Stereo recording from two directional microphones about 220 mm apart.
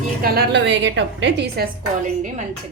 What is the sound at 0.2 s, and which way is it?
A woman's voice, 45° right (ahead or behind).